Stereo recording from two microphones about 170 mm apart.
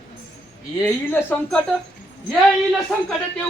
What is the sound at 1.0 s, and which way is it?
Speech, 15° left (ahead or behind).